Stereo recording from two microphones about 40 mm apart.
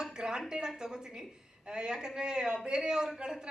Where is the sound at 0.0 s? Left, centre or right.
Centre.